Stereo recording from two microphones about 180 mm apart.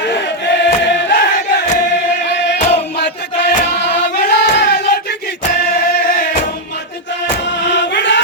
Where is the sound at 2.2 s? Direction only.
70° left (ahead or behind).